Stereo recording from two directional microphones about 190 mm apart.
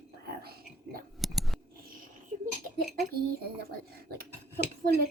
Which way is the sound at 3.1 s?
55° right (ahead or behind).